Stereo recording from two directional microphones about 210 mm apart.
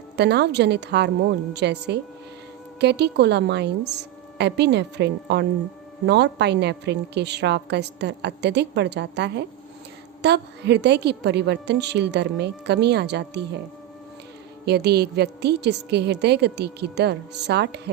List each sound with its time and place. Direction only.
0.2 s a woman's voice: 50° right (ahead or behind)
14.6 s a woman's voice: 50° right (ahead or behind)